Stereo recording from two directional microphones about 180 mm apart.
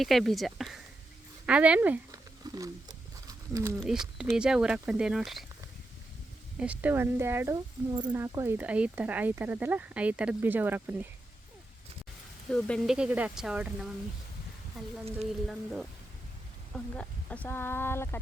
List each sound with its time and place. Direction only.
0.0 s speech: centre (ahead or behind)
2.4 s wild animals: 20° right (ahead or behind)
3.2 s a sound: 15° right (ahead or behind)
3.8 s speech: 5° right (ahead or behind)
6.6 s speech: 10° right (ahead or behind)
12.5 s speech: 5° left (ahead or behind)
14.8 s speech: centre (ahead or behind)